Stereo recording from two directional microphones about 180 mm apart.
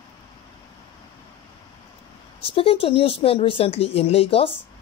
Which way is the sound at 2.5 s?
30° left (ahead or behind).